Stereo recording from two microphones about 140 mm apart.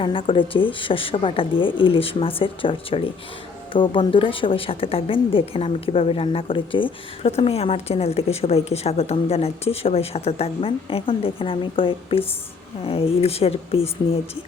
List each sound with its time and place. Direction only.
0.0 s a woman's voice: 40° left (ahead or behind)